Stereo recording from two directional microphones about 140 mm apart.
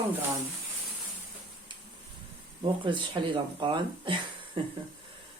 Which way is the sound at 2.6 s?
35° right (ahead or behind).